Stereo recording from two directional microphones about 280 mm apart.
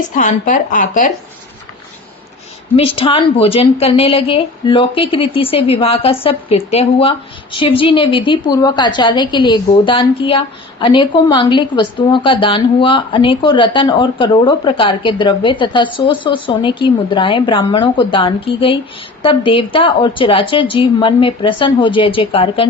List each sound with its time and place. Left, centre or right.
0.1 s a woman's voice: left
2.7 s a woman's voice: centre